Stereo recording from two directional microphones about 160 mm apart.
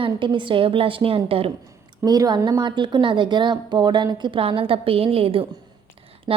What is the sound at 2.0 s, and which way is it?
A woman's voice, 25° right (ahead or behind).